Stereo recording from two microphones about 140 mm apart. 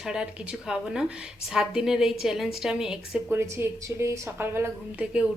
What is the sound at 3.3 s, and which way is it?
A woman's voice, 20° right (ahead or behind).